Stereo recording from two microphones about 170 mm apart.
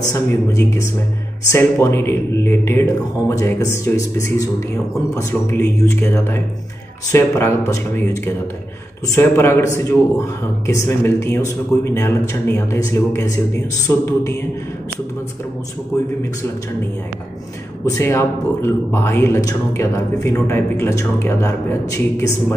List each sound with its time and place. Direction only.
0.1 s speech: 20° left (ahead or behind)
17.8 s speech: 15° left (ahead or behind)